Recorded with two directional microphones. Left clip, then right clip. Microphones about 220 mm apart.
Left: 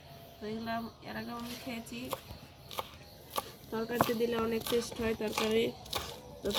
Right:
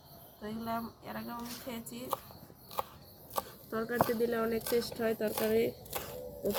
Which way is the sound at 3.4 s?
10° right (ahead or behind).